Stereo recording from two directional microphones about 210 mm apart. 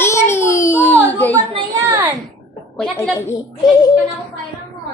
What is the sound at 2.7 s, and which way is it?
A child's voice, 5° left (ahead or behind).